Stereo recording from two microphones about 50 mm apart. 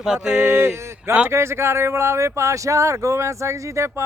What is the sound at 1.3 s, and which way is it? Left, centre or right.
Speech, right.